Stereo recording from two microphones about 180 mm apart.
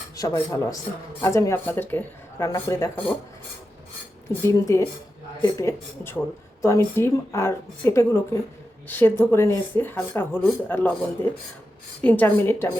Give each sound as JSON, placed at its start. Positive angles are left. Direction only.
{"t": 0.2, "sound": "speech", "side_deg": 15}
{"t": 4.3, "sound": "speech", "side_deg": 15}
{"t": 12.0, "sound": "speech", "side_deg": 10}